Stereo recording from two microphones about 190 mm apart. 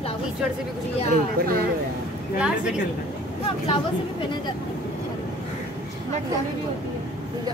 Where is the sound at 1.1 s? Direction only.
50° right (ahead or behind).